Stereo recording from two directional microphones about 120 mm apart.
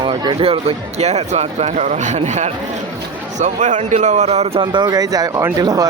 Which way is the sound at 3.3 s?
90° right.